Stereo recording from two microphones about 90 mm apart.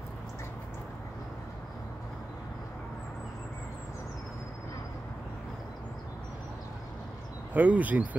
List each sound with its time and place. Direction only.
7.5 s speech: 20° right (ahead or behind)